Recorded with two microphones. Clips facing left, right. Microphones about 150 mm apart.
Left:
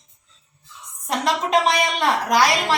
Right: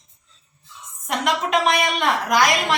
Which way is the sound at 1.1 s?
30° left (ahead or behind).